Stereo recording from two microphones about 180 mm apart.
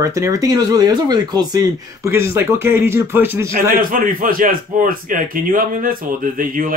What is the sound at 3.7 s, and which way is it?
A man's voice, 50° right (ahead or behind).